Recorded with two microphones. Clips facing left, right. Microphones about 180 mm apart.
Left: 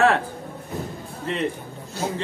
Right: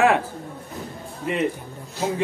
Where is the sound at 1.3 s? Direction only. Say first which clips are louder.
Right 3 dB; 10° right (ahead or behind).